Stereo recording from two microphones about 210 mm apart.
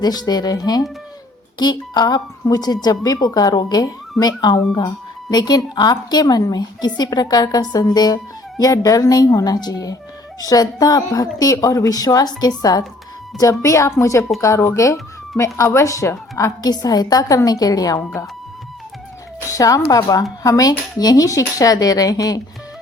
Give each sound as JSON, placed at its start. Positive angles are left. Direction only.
{"t": 0.0, "sound": "speech", "side_deg": 20}
{"t": 19.5, "sound": "speech", "side_deg": 15}